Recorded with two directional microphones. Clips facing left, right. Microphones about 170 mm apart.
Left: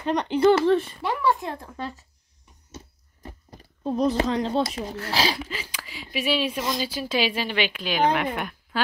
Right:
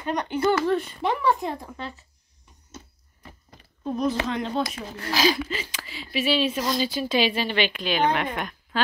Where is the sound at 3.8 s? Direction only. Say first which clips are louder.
Left 3 dB; 35° left (ahead or behind).